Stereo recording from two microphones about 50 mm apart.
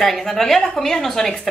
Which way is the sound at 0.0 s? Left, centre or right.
Centre.